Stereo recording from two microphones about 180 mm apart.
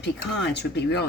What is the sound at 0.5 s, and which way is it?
Speech, 65° left (ahead or behind).